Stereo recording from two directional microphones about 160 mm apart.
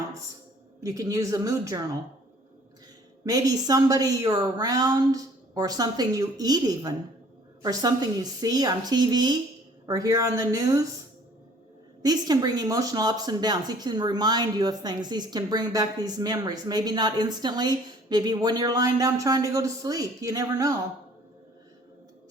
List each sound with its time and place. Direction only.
0.8 s speech: 20° right (ahead or behind)
3.2 s speech: 20° right (ahead or behind)
12.0 s speech: 25° right (ahead or behind)